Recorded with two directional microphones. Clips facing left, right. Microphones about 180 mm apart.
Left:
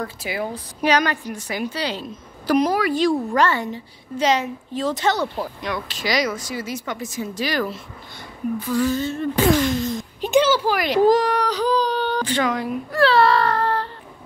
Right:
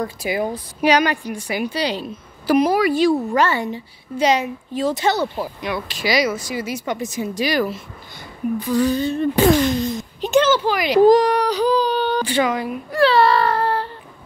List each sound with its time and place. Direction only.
0.0 s a woman's voice: 15° right (ahead or behind)
10.2 s speech: 10° left (ahead or behind)
11.1 s speech: 15° right (ahead or behind)